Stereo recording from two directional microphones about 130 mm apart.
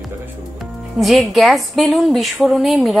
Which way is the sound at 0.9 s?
Centre (ahead or behind).